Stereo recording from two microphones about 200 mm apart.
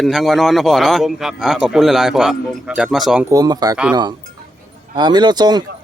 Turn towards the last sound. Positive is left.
turn(degrees=-20)  # may be behind; listen again after turning